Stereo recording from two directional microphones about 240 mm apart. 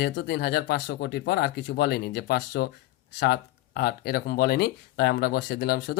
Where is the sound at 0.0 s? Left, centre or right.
Left.